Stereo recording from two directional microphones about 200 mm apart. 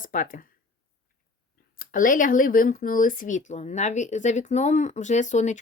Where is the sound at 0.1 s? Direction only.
40° left (ahead or behind).